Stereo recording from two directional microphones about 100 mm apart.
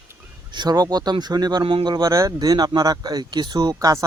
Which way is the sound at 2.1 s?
35° right (ahead or behind).